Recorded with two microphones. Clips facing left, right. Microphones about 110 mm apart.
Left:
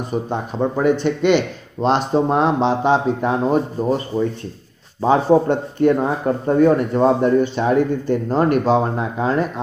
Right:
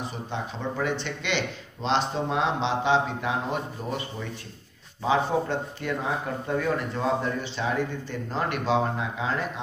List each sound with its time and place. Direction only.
0.1 s speech: 50° left (ahead or behind)